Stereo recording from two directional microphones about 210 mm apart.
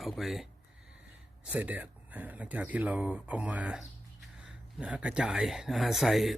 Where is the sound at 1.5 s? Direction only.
5° right (ahead or behind).